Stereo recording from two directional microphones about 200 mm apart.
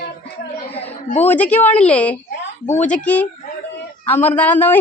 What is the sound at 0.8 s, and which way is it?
Speech, 30° left (ahead or behind).